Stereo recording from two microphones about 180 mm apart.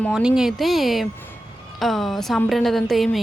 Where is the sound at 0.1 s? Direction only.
5° right (ahead or behind).